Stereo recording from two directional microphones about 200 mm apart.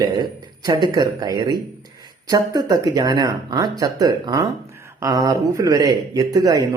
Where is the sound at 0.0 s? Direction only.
20° right (ahead or behind).